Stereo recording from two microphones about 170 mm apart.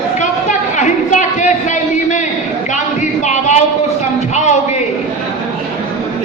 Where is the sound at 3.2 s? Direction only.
45° left (ahead or behind).